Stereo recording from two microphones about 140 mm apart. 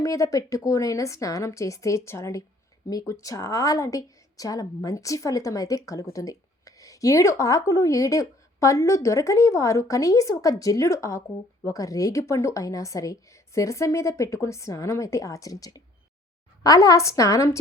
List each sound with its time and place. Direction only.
0.0 s speech: 25° left (ahead or behind)